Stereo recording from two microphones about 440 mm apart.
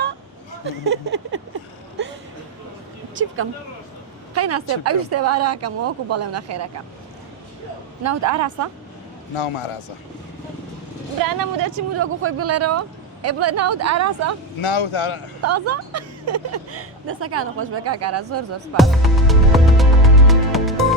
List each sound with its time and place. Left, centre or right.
0.6 s a sound: right
4.4 s speech: right
8.0 s speech: right
9.3 s a man's voice: left
11.2 s speech: right
11.9 s speech: right
14.6 s a man's voice: left
15.4 s speech: right
18.8 s music: centre